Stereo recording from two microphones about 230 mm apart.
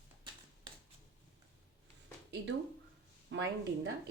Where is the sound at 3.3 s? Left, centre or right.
Right.